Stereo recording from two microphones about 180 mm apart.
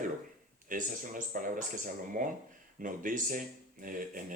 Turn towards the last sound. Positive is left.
turn(degrees=-50)  # may be behind; listen again after turning